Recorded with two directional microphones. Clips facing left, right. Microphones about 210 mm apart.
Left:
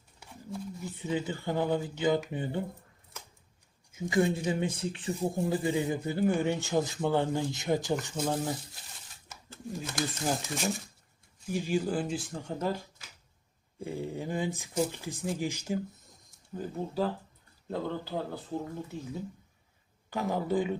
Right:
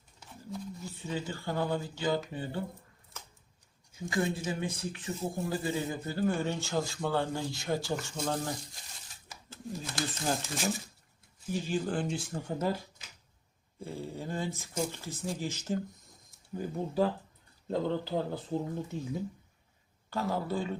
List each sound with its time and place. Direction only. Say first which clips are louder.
0.2 s speech: left 1 dB; 15° left (ahead or behind)
3.9 s speech: left 5 dB; 20° left (ahead or behind)
8.1 s speech: left 3 dB; 5° left (ahead or behind)
11.4 s speech: left 2 dB; 10° left (ahead or behind); by 12.7 s 5° right (ahead or behind)
13.0 s a sound: even; 20° right (ahead or behind)
13.7 s speech: left 4 dB; 15° left (ahead or behind)
16.6 s speech: right 2 dB; 15° right (ahead or behind)
20.1 s speech: left 2 dB; 15° left (ahead or behind)